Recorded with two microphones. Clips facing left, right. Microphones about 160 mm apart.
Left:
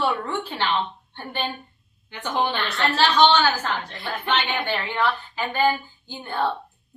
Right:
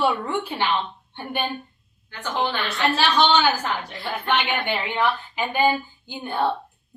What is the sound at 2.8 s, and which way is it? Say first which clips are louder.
A woman's voice: left 2 dB; 15° right (ahead or behind).